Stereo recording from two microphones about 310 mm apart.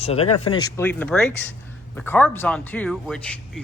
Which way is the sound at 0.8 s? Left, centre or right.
Centre.